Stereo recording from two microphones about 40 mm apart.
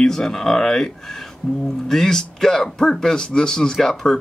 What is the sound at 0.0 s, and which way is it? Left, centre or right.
Speech, centre.